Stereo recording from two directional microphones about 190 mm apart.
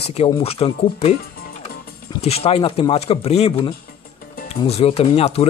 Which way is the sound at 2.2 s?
30° left (ahead or behind).